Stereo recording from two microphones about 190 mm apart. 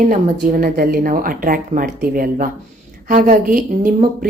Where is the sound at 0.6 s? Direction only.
50° right (ahead or behind).